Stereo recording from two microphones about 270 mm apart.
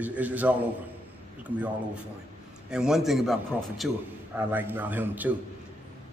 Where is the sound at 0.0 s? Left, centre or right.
Centre.